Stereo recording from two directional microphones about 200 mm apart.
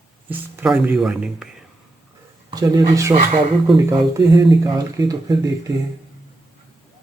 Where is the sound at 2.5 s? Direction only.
20° right (ahead or behind).